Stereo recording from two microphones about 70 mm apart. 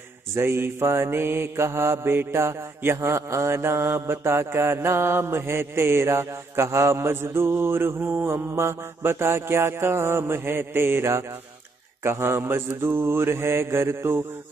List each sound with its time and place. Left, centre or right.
0.3 s mantra: right